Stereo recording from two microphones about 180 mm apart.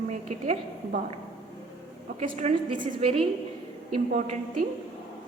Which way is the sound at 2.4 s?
40° right (ahead or behind).